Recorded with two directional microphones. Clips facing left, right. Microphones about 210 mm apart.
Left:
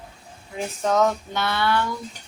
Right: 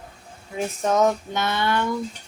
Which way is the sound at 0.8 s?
20° right (ahead or behind).